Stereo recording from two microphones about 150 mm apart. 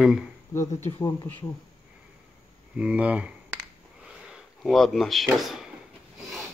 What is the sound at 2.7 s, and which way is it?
Speech, 5° right (ahead or behind).